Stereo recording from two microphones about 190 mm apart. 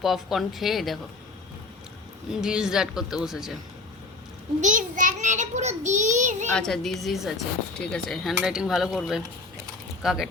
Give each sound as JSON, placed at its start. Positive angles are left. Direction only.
{"t": 0.0, "sound": "speech", "side_deg": 0}
{"t": 2.3, "sound": "speech", "side_deg": -5}
{"t": 4.6, "sound": "child singing", "side_deg": -40}
{"t": 6.5, "sound": "speech", "side_deg": 5}